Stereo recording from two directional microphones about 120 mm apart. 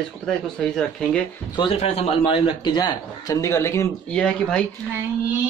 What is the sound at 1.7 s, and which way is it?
A man's voice, 60° left (ahead or behind).